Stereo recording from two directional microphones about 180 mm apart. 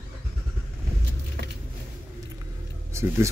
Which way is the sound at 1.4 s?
70° right (ahead or behind).